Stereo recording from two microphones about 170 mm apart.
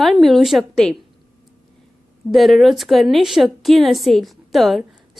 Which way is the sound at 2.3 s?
Centre (ahead or behind).